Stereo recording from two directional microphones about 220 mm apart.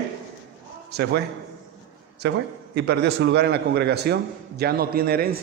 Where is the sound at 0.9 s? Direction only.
50° right (ahead or behind).